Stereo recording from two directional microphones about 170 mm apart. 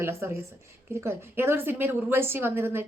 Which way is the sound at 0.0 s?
15° right (ahead or behind).